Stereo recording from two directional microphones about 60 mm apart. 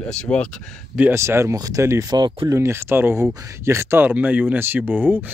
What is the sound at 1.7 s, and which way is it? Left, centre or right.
Speech, right.